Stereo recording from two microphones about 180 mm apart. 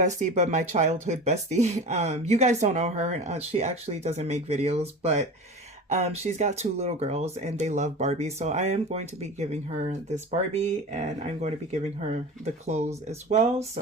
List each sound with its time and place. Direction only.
0.2 s speech: 40° right (ahead or behind)